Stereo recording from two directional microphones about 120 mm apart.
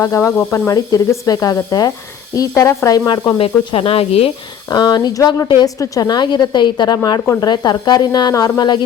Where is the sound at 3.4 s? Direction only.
50° left (ahead or behind).